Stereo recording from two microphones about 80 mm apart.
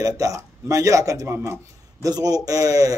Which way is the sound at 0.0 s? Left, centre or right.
Right.